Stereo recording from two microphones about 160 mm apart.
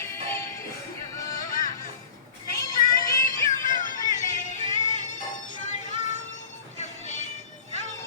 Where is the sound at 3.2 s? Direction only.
55° left (ahead or behind).